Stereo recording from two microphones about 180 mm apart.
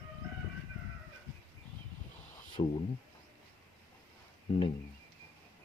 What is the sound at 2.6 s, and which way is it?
Speech, 35° left (ahead or behind).